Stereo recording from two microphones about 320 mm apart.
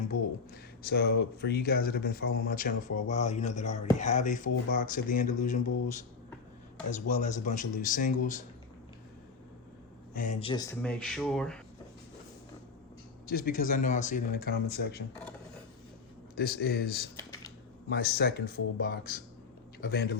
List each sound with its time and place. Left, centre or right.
0.1 s speech: left
0.9 s speech: left
10.2 s speech: centre
13.3 s speech: left
16.5 s speech: left